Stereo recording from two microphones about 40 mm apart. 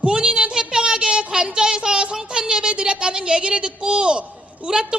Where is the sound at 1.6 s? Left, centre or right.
Centre.